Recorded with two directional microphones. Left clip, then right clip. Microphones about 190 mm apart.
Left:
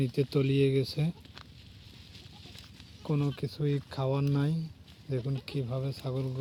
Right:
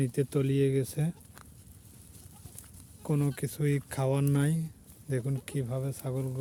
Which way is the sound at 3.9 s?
30° right (ahead or behind).